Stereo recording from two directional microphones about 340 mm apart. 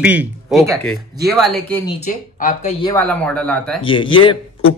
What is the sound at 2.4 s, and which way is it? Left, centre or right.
Speech, left.